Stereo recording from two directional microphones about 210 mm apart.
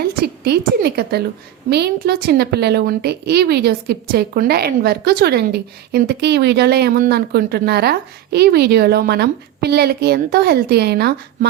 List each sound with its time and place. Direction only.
0.2 s a woman's voice: 50° right (ahead or behind)